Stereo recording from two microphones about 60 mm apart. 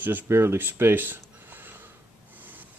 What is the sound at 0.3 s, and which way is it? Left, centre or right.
Speech, right.